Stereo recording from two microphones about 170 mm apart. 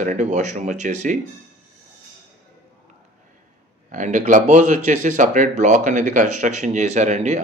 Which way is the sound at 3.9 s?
45° right (ahead or behind).